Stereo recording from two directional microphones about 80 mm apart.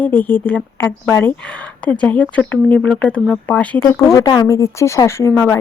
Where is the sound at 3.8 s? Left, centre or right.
Left.